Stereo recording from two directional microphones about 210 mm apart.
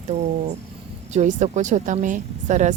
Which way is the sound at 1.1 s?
35° right (ahead or behind).